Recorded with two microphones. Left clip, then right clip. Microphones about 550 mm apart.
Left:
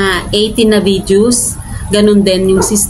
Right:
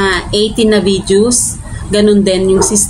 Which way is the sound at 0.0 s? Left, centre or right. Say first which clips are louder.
Even; left.